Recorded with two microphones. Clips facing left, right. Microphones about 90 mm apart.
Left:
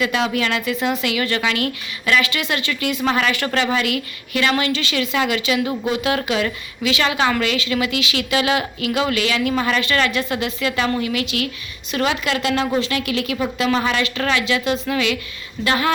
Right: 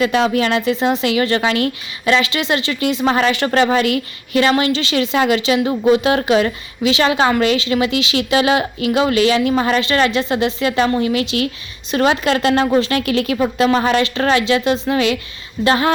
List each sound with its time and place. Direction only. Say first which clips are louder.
0.0 s a woman's voice: right 5 dB; 35° right (ahead or behind)